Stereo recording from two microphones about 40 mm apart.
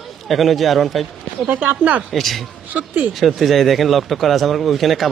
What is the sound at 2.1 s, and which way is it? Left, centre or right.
Speech, centre.